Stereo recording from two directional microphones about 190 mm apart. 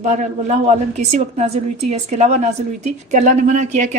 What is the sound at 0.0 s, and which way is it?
A woman's voice, 40° right (ahead or behind).